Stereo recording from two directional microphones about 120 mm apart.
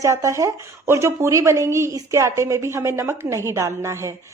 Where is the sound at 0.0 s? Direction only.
25° right (ahead or behind).